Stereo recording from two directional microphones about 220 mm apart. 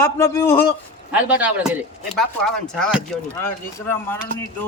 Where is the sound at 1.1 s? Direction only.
5° right (ahead or behind).